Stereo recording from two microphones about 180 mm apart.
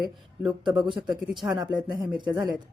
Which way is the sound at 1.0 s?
5° right (ahead or behind).